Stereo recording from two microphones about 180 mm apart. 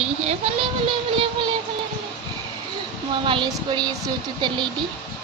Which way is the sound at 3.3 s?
25° right (ahead or behind).